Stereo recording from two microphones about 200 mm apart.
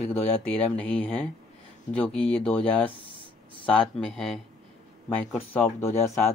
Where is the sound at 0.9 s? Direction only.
5° left (ahead or behind).